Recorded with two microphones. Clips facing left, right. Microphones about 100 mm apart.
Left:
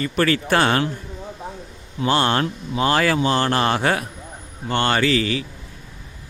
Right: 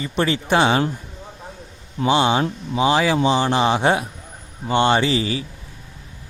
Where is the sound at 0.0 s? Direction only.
20° right (ahead or behind).